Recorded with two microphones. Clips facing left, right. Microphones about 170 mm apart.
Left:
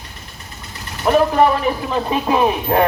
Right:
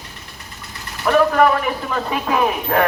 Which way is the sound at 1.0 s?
25° left (ahead or behind).